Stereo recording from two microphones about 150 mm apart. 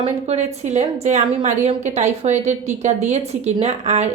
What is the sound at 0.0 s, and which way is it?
A woman's voice, 45° right (ahead or behind).